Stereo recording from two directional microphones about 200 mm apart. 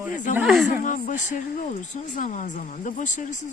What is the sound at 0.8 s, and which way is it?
Speech, 40° left (ahead or behind).